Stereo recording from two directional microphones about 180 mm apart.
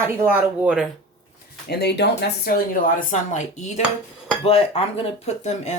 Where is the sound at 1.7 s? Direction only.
65° left (ahead or behind); by 5.8 s 40° left (ahead or behind).